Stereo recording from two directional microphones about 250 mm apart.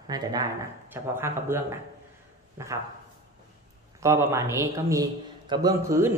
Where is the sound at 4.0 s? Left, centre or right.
Centre.